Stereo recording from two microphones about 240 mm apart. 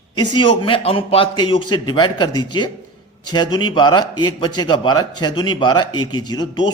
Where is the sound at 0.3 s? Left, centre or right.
Left.